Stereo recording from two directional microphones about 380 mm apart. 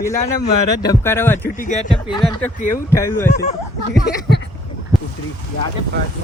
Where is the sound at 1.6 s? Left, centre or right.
Centre.